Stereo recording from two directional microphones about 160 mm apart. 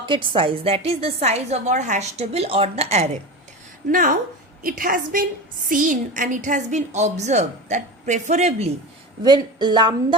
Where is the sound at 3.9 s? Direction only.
60° right (ahead or behind).